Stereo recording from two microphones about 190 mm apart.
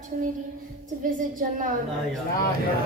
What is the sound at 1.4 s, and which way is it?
Speech, 45° right (ahead or behind).